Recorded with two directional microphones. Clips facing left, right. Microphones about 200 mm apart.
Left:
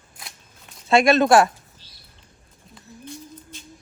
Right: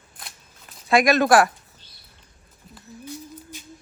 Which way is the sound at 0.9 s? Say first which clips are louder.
Left 2 dB; 25° left (ahead or behind).